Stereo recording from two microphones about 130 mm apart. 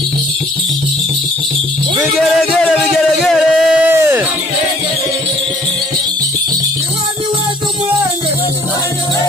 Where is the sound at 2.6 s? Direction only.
Centre (ahead or behind).